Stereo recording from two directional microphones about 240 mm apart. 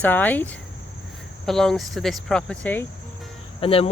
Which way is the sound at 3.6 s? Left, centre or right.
Left.